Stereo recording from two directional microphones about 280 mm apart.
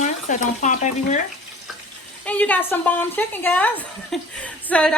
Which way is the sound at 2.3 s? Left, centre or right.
Centre.